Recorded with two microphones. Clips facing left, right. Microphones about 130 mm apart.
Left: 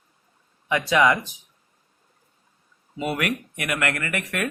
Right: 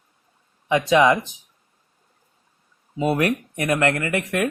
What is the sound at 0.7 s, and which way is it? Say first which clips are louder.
Speech: right 3 dB; 20° right (ahead or behind).